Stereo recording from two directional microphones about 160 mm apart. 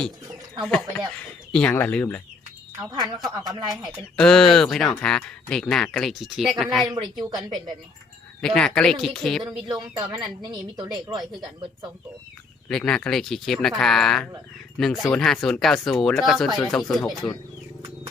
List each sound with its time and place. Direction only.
0.6 s speech: 5° left (ahead or behind)
2.7 s a woman's voice: 25° right (ahead or behind)
4.2 s speech: 5° left (ahead or behind)
6.8 s a woman's voice: 25° right (ahead or behind)
8.4 s speech: 5° left (ahead or behind)
9.9 s a woman's voice: 25° right (ahead or behind)
12.6 s speech: 5° left (ahead or behind)